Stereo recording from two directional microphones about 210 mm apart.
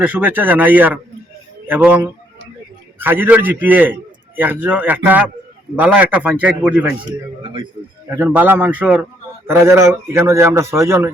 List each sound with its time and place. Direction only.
0.0 s a man's voice: 10° right (ahead or behind)
3.0 s a man's voice: 10° right (ahead or behind)
7.4 s a man's voice: 25° right (ahead or behind)
8.1 s a man's voice: 10° right (ahead or behind)